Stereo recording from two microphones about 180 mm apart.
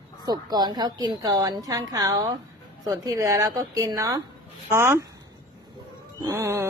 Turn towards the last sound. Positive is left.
turn(degrees=-15)  # may be behind; listen again after turning